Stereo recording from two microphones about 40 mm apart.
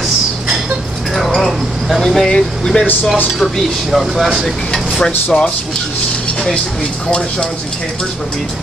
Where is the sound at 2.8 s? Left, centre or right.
Left.